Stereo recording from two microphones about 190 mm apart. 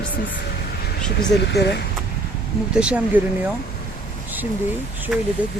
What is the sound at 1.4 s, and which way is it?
Speech, 60° left (ahead or behind).